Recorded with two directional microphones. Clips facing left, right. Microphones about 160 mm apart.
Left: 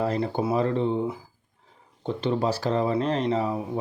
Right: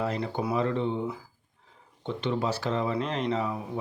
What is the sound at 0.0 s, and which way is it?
Speech, 35° left (ahead or behind).